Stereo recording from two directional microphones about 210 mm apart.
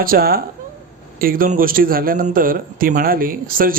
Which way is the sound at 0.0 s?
45° right (ahead or behind).